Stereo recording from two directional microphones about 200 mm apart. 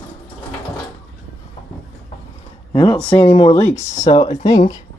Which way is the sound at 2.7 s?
25° left (ahead or behind).